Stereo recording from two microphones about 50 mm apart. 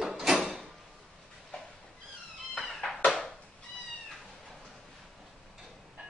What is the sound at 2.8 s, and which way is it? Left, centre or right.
Cat, centre.